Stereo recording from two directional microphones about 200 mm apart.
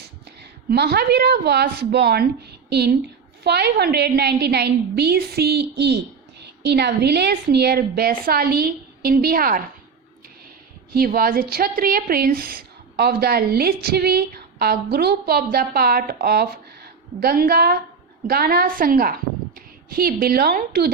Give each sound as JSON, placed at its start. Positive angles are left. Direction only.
{"t": 0.7, "sound": "a woman's voice", "side_deg": -50}
{"t": 10.9, "sound": "a woman's voice", "side_deg": -50}